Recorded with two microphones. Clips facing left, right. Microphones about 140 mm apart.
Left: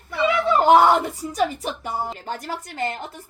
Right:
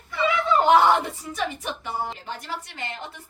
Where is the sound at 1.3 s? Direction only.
40° left (ahead or behind).